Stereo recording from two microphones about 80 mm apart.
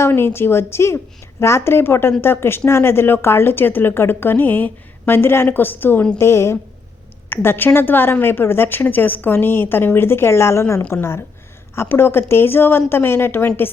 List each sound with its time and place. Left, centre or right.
0.0 s a woman's voice: left